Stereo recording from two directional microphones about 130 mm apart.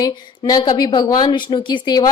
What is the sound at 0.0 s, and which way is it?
A woman's voice, 30° left (ahead or behind).